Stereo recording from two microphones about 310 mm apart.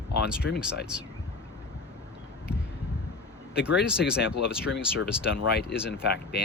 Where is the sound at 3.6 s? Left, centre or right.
Centre.